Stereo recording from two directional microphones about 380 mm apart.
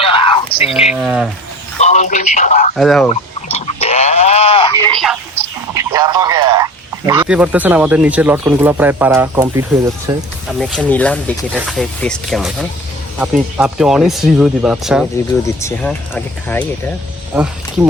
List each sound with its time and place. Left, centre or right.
0.0 s a sound: centre
0.9 s speech: centre
1.8 s speech: centre
2.7 s speech: centre
3.1 s a sound: centre
5.7 s radio: centre
7.1 s speech: centre